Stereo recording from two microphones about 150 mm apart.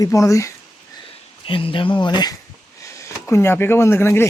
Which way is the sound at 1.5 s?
35° left (ahead or behind).